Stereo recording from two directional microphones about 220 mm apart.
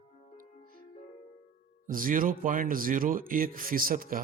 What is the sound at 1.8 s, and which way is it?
Speech, 40° right (ahead or behind).